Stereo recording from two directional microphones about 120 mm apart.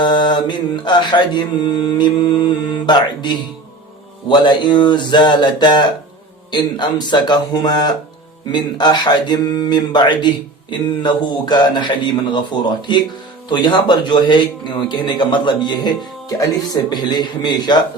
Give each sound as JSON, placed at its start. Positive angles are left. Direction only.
{"t": 0.0, "sound": "speech", "side_deg": 40}